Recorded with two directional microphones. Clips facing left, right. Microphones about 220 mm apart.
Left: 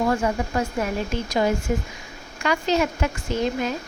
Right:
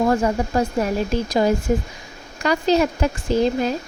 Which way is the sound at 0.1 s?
35° right (ahead or behind).